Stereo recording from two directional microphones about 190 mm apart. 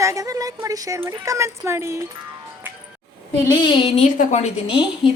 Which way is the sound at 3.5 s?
25° left (ahead or behind).